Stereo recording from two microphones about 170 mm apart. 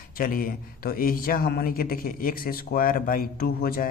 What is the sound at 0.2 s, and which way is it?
A man's voice, 60° left (ahead or behind).